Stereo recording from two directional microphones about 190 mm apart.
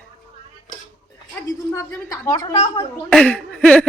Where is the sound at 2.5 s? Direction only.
30° left (ahead or behind).